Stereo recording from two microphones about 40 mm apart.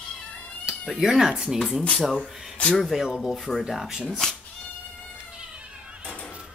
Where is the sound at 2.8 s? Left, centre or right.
Centre.